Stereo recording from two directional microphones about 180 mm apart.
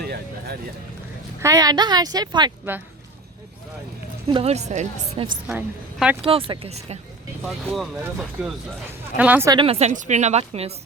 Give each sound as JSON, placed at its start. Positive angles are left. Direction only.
{"t": 1.4, "sound": "speech", "side_deg": -20}
{"t": 2.7, "sound": "speech", "side_deg": -10}
{"t": 4.3, "sound": "a woman's voice", "side_deg": -35}
{"t": 5.5, "sound": "a woman's voice", "side_deg": -5}
{"t": 6.2, "sound": "a woman's voice", "side_deg": -30}
{"t": 7.4, "sound": "speech", "side_deg": 0}
{"t": 9.5, "sound": "a woman's voice", "side_deg": -30}